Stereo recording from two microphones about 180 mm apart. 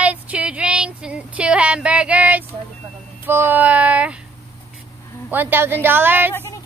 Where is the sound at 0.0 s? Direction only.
5° right (ahead or behind).